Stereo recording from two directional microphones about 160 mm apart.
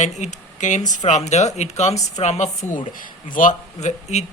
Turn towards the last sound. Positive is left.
turn(degrees=45)  # may be behind; listen again after turning